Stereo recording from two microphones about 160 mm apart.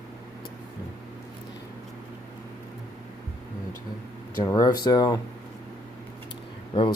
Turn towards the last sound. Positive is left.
turn(degrees=30)  # may be behind; listen again after turning